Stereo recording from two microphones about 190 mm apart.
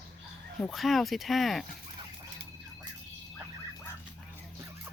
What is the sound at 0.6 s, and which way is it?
Speech, centre (ahead or behind).